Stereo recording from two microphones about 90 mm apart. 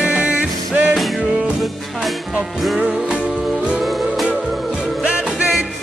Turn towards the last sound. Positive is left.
turn(degrees=-10)  # may be behind; listen again after turning